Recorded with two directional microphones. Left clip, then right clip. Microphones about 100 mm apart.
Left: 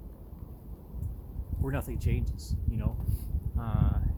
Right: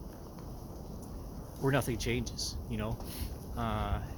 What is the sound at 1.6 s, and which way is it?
Speech, 10° right (ahead or behind).